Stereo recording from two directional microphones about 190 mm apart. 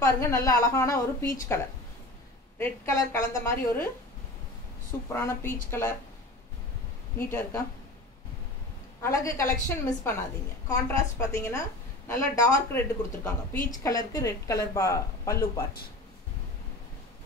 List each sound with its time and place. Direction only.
0.0 s a woman's voice: 15° left (ahead or behind)
2.6 s a woman's voice: 15° left (ahead or behind)
5.1 s a woman's voice: 15° left (ahead or behind)
7.2 s a woman's voice: 10° left (ahead or behind)
9.0 s a woman's voice: 15° left (ahead or behind)
10.7 s a woman's voice: 15° left (ahead or behind)